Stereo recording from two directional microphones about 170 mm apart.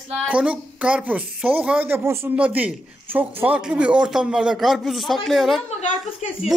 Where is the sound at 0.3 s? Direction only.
5° right (ahead or behind).